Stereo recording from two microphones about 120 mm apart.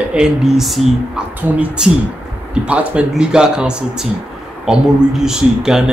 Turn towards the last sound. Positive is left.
turn(degrees=-5)  # may be behind; listen again after turning